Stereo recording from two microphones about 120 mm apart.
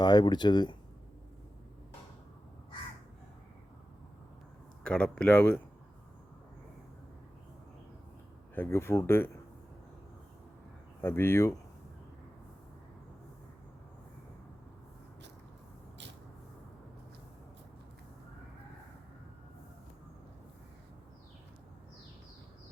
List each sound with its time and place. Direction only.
0.0 s speech: 35° left (ahead or behind)
4.8 s speech: 10° left (ahead or behind)
8.5 s speech: 20° left (ahead or behind)
11.0 s speech: 20° left (ahead or behind)